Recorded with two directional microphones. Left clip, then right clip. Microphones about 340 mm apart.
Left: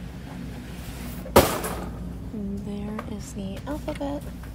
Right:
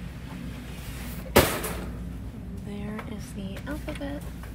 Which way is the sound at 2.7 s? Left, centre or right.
Centre.